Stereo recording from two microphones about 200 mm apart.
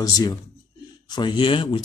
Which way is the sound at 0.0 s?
20° left (ahead or behind).